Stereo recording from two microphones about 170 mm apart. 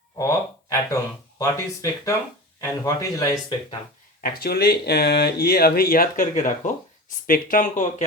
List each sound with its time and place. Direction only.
0.2 s a sound: 20° left (ahead or behind)
1.4 s speech: 20° left (ahead or behind)
4.2 s speech: 65° left (ahead or behind); by 8.0 s 50° left (ahead or behind)